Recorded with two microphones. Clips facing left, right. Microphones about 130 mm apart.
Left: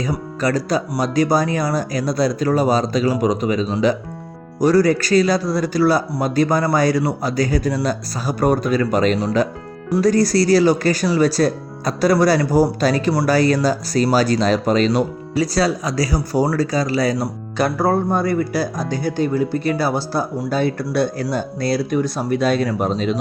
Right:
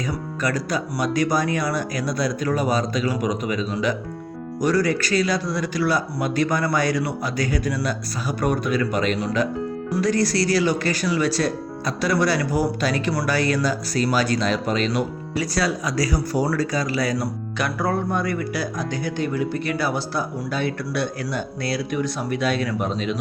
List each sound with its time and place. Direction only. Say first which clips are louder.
0.0 s speech: left 4 dB; 30° left (ahead or behind)